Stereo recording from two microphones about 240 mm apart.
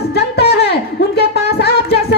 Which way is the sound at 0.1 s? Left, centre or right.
Left.